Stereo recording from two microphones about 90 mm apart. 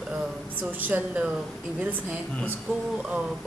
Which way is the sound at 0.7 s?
20° right (ahead or behind).